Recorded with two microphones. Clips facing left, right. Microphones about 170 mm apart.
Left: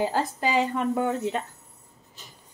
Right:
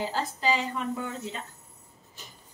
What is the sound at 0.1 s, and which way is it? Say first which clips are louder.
Speech: left 3 dB; 55° left (ahead or behind).